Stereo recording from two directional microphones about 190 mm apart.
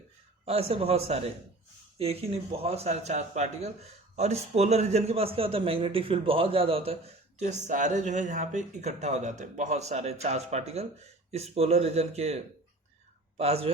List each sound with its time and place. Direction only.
0.4 s speech: 30° right (ahead or behind)